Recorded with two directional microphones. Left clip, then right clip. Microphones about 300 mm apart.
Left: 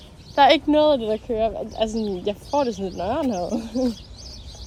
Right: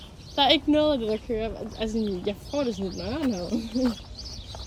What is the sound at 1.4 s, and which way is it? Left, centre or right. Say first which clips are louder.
A woman's voice: left 8 dB; centre.